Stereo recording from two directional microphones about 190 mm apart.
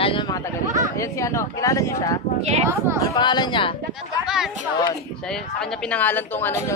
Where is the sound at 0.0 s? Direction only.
25° left (ahead or behind).